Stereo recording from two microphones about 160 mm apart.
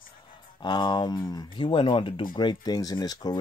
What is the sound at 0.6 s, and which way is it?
Speech, 25° left (ahead or behind).